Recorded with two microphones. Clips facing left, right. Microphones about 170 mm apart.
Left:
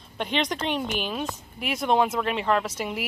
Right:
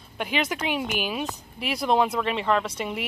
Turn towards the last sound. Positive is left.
turn(degrees=5)  # may be behind; listen again after turning